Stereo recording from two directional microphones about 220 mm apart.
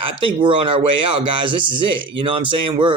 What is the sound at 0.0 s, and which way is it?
Speech, 25° right (ahead or behind).